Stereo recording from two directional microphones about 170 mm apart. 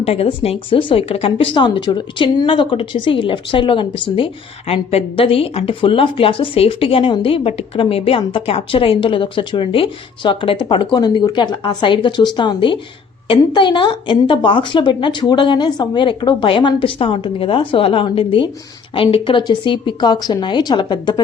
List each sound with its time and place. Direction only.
0.0 s a woman's voice: 35° left (ahead or behind)